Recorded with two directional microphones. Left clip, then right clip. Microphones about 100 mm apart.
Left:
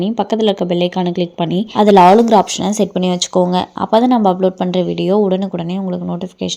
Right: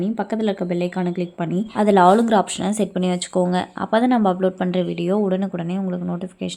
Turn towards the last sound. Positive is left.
turn(degrees=25)  # may be behind; listen again after turning